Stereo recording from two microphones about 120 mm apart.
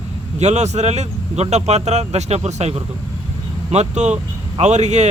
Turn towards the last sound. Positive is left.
turn(degrees=-70)  # may be behind; listen again after turning